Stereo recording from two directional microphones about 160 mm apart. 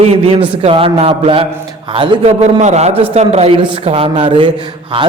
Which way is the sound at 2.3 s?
45° right (ahead or behind).